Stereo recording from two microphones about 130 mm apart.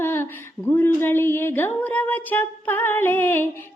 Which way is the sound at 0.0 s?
15° left (ahead or behind).